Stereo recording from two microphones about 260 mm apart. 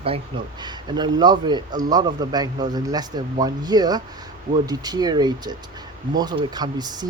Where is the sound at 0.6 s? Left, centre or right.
Centre.